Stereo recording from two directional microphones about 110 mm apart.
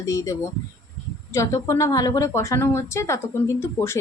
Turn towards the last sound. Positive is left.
turn(degrees=25)  # may be behind; listen again after turning